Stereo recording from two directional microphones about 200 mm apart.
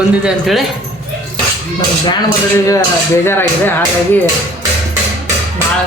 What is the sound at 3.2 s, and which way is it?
Speech, 10° left (ahead or behind).